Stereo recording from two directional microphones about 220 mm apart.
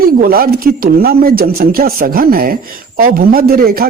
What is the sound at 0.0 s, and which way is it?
A man's voice, 40° right (ahead or behind).